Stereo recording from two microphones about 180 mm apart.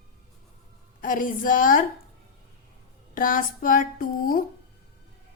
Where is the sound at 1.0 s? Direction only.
50° left (ahead or behind).